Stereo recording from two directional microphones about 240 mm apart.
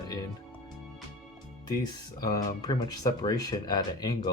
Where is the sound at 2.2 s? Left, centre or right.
Centre.